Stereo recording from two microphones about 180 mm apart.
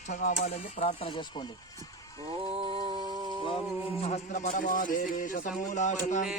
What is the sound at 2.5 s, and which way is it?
Music, 30° right (ahead or behind).